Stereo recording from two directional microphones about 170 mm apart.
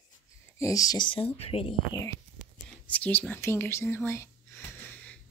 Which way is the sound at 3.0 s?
10° left (ahead or behind).